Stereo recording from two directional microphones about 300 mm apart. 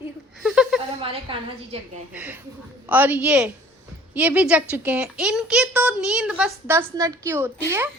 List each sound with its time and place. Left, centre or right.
0.4 s a sound: centre
1.7 s a woman's voice: centre
2.1 s speech: centre